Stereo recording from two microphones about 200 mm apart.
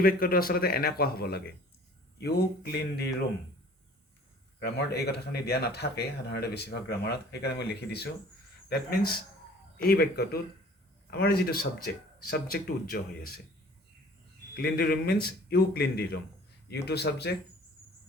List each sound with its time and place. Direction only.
0.0 s speech: 45° left (ahead or behind)
4.6 s a man's voice: 55° left (ahead or behind)
14.5 s a man's voice: 50° left (ahead or behind)